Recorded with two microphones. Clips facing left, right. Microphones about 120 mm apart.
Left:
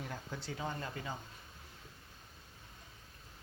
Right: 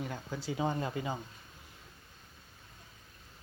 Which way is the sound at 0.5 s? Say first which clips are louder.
Right 8 dB; 20° right (ahead or behind).